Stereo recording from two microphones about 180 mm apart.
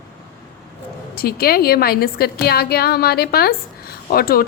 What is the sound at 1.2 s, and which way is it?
A woman's voice, 55° left (ahead or behind).